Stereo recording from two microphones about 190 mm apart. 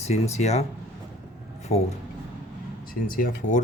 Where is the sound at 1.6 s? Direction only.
35° left (ahead or behind).